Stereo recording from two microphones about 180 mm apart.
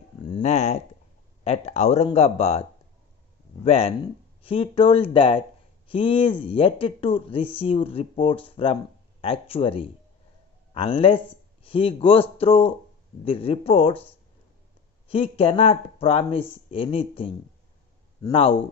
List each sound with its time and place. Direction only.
0.4 s a sound: 35° left (ahead or behind)
1.4 s speech: 35° left (ahead or behind)
3.6 s speech: 35° left (ahead or behind)
15.0 s speech: 30° left (ahead or behind)